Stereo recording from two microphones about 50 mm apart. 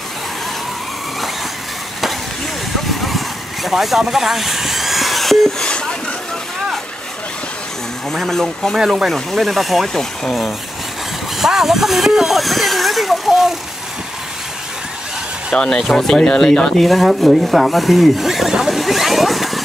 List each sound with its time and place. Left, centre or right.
2.9 s vehicle: centre
5.6 s a sound: centre
8.1 s speech: centre
8.7 s speech: centre
9.1 s speech: centre
11.3 s speech: centre
15.5 s speech: centre
15.8 s speech: centre